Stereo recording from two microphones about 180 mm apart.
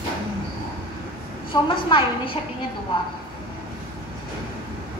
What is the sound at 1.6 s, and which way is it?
Speech, 30° left (ahead or behind).